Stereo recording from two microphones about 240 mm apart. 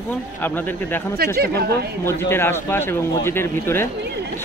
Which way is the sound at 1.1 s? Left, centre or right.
Right.